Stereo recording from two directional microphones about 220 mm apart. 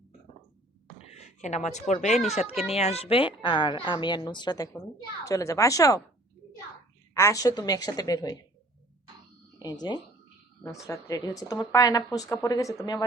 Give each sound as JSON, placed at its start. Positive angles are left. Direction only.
{"t": 1.1, "sound": "a woman's voice", "side_deg": 30}
{"t": 7.1, "sound": "a woman's voice", "side_deg": 15}
{"t": 9.6, "sound": "a woman's voice", "side_deg": 20}